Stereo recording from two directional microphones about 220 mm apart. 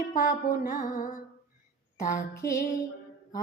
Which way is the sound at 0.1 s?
40° left (ahead or behind).